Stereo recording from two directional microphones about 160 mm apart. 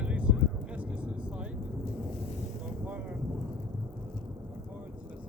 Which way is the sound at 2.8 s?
10° right (ahead or behind).